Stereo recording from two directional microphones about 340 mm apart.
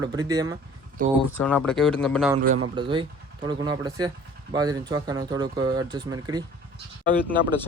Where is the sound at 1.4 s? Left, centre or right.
Centre.